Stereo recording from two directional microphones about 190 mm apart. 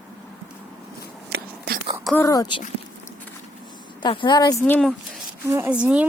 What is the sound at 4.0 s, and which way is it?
Speech, 25° left (ahead or behind).